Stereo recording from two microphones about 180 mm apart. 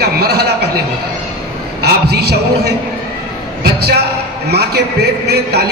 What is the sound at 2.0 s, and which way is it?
A man's voice, 65° right (ahead or behind).